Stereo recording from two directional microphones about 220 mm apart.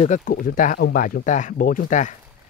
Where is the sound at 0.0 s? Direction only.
35° left (ahead or behind).